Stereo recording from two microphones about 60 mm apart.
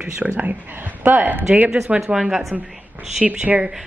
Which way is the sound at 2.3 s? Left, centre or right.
Centre.